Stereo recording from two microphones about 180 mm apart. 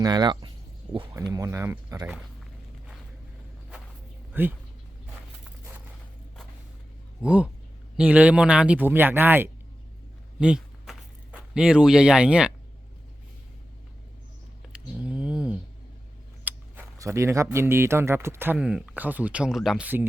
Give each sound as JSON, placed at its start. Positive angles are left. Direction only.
{"t": 0.0, "sound": "speech", "side_deg": -25}
{"t": 4.3, "sound": "speech", "side_deg": -10}
{"t": 7.2, "sound": "speech", "side_deg": -5}
{"t": 10.4, "sound": "a sound", "side_deg": -5}
{"t": 14.9, "sound": "a sound", "side_deg": -5}
{"t": 16.4, "sound": "speech", "side_deg": -10}